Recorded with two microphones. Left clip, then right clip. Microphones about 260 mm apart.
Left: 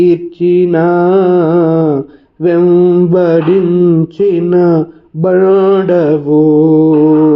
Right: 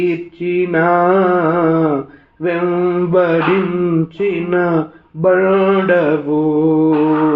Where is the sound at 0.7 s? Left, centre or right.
Left.